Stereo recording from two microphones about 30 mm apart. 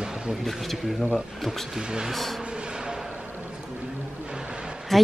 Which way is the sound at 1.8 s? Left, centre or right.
Right.